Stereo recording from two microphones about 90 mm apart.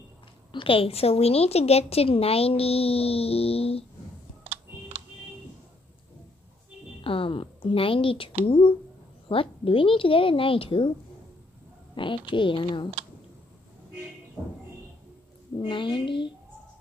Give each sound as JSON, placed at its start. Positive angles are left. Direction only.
{"t": 0.5, "sound": "speech", "side_deg": 75}
{"t": 7.0, "sound": "a woman's voice", "side_deg": 80}
{"t": 9.3, "sound": "a woman's voice", "side_deg": 90}
{"t": 11.9, "sound": "speech", "side_deg": 60}
{"t": 15.5, "sound": "speech", "side_deg": 60}